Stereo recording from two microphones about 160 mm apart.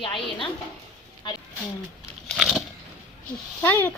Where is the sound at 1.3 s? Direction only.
30° left (ahead or behind).